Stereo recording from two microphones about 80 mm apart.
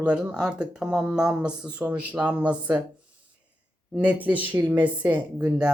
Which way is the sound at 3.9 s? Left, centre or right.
Centre.